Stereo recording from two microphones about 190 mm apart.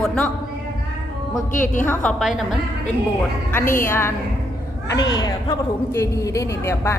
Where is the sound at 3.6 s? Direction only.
45° left (ahead or behind).